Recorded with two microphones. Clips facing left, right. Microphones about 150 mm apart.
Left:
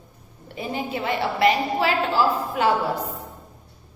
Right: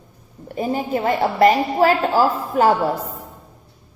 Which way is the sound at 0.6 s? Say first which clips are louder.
Right 6 dB; 45° right (ahead or behind).